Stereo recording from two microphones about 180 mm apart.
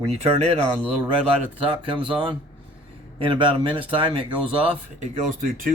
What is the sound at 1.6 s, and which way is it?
Speech, 30° right (ahead or behind).